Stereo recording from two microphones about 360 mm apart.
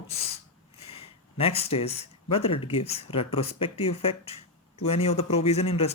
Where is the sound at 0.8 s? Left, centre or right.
Centre.